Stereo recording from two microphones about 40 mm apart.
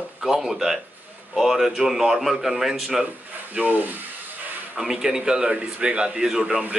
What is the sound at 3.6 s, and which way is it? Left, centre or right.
Speech, right.